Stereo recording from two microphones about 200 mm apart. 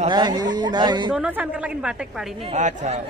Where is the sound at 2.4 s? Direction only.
35° right (ahead or behind).